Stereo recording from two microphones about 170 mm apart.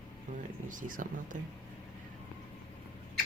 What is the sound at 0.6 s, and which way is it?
Speech, 50° right (ahead or behind).